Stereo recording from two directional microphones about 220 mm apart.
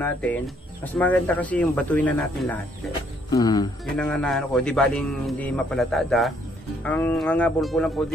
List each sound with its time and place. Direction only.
0.0 s speech: 5° left (ahead or behind)
3.3 s speech: 20° left (ahead or behind)
3.9 s a man's voice: 5° left (ahead or behind)